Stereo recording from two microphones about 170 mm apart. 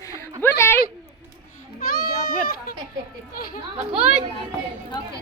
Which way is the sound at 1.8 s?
60° left (ahead or behind).